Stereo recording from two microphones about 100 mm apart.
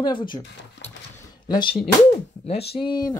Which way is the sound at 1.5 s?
50° left (ahead or behind).